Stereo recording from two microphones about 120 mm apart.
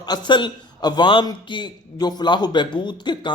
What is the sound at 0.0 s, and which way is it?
Speech, 35° left (ahead or behind).